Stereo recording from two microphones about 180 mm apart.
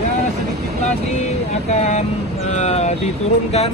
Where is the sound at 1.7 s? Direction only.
35° left (ahead or behind).